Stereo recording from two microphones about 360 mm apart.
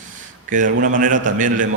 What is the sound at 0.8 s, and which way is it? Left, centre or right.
Speech, right.